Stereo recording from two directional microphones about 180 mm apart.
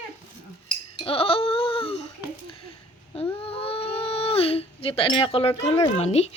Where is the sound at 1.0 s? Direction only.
30° left (ahead or behind).